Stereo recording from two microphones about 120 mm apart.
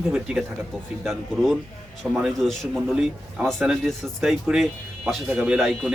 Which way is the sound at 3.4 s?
Centre (ahead or behind).